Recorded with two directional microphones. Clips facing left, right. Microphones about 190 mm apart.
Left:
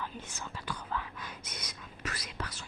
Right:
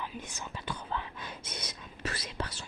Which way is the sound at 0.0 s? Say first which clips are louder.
Right 1 dB; 15° right (ahead or behind).